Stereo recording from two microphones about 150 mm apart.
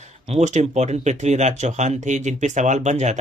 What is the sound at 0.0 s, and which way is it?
Speech, 50° right (ahead or behind).